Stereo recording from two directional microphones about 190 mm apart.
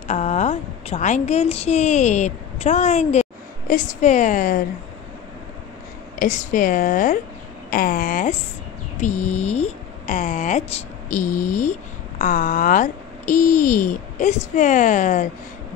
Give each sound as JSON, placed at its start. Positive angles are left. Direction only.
{"t": 0.1, "sound": "a woman's voice", "side_deg": 40}
{"t": 6.1, "sound": "a woman's voice", "side_deg": 45}